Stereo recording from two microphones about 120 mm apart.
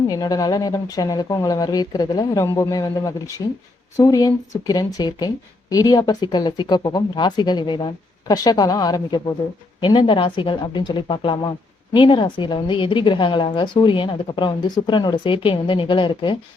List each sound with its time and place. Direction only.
0.1 s a woman's voice: 30° left (ahead or behind)
2.4 s a woman's voice: 25° left (ahead or behind); by 16.4 s 45° left (ahead or behind)